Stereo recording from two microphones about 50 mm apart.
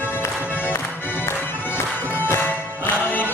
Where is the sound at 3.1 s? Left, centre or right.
Left.